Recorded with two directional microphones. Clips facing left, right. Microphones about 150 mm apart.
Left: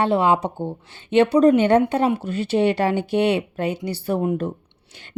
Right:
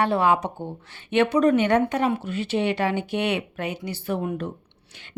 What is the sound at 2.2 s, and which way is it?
Speech, 40° left (ahead or behind).